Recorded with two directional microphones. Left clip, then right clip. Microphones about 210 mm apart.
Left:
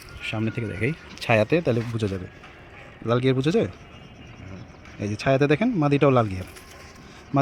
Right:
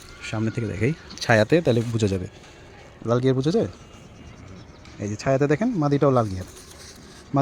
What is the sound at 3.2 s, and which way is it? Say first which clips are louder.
Speech: even; 5° right (ahead or behind).